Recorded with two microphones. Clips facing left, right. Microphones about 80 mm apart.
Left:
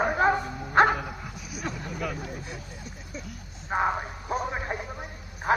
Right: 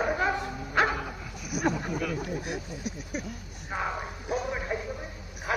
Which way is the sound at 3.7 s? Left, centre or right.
Left.